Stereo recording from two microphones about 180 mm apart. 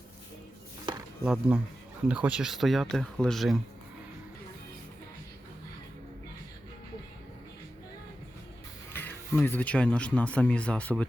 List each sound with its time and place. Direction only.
0.9 s a sound: 25° right (ahead or behind)
1.2 s speech: 5° right (ahead or behind)
8.9 s speech: 10° left (ahead or behind)